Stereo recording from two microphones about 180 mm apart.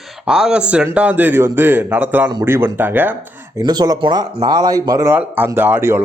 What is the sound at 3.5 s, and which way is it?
Speech, 20° right (ahead or behind).